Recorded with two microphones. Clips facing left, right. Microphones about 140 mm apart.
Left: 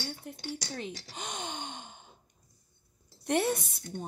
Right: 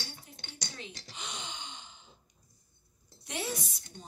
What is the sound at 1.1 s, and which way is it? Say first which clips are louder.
Sigh: left 3 dB; 50° left (ahead or behind).